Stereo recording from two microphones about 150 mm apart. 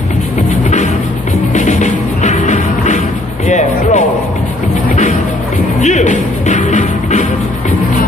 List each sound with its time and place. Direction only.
1.5 s music: 55° left (ahead or behind)
5.8 s music: 50° left (ahead or behind)